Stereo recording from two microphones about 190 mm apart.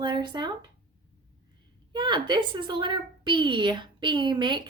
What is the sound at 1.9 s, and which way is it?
A woman's voice, 25° right (ahead or behind).